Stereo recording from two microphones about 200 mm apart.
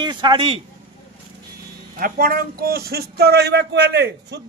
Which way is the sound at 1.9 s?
45° right (ahead or behind).